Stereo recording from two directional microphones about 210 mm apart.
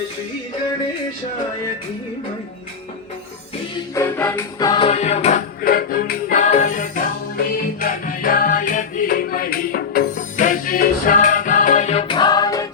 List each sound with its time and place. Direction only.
3.9 s music: 10° left (ahead or behind)